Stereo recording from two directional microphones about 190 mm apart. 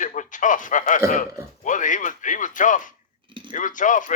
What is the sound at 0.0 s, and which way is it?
A man's voice, 40° left (ahead or behind).